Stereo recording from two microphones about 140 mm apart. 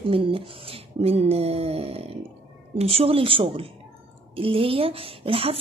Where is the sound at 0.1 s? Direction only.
40° right (ahead or behind).